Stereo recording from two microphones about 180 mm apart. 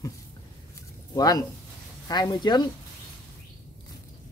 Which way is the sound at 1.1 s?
20° left (ahead or behind).